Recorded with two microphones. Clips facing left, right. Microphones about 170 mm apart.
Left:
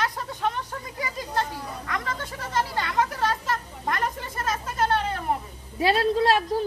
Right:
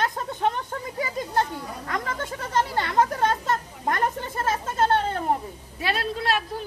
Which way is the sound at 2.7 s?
40° right (ahead or behind).